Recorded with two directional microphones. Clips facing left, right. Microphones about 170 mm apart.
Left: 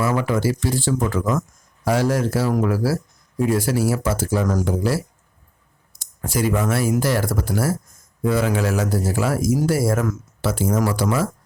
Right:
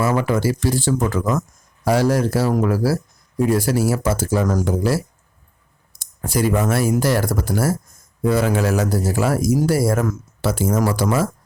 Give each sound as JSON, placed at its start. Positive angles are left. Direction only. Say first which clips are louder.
{"t": 0.0, "sound": "speech", "louder": "right 2 dB", "side_deg": -40}